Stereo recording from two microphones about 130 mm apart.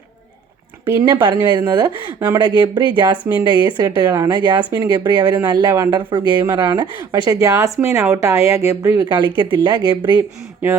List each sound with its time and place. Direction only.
1.0 s a woman's voice: 30° right (ahead or behind)
6.1 s a woman's voice: 35° right (ahead or behind)
9.0 s a woman's voice: 35° right (ahead or behind)